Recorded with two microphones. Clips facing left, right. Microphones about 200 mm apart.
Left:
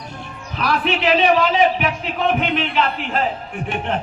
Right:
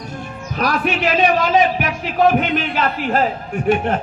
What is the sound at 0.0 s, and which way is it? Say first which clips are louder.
Speech: right 4 dB; 45° right (ahead or behind).